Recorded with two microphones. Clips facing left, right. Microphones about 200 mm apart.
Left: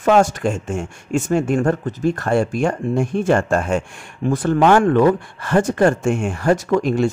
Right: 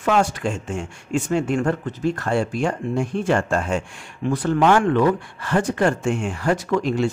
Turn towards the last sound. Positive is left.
turn(degrees=50)  # may be behind; listen again after turning